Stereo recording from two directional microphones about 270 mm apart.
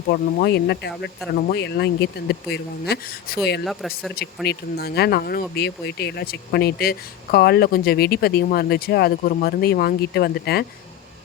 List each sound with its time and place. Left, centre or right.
0.1 s speech: left
3.7 s speech: centre
4.4 s speech: left